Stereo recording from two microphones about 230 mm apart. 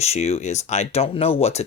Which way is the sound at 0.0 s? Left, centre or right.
Left.